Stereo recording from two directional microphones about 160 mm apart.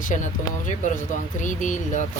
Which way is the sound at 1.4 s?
50° left (ahead or behind).